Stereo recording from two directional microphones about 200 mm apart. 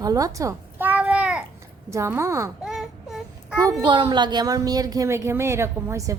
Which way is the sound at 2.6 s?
Centre (ahead or behind).